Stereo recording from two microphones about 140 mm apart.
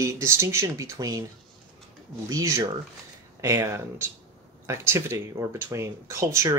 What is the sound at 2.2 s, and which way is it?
Speech, 25° right (ahead or behind).